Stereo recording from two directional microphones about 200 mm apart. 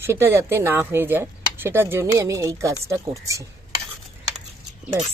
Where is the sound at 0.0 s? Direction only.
10° right (ahead or behind).